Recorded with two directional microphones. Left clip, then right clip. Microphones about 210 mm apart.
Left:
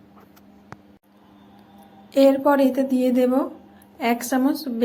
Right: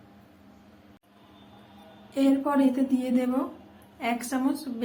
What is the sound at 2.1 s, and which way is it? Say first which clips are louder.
A woman's voice: left 9 dB; 30° left (ahead or behind).